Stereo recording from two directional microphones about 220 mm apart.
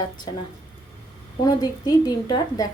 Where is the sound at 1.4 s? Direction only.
20° left (ahead or behind).